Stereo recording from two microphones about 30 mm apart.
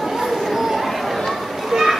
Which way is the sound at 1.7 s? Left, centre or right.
Centre.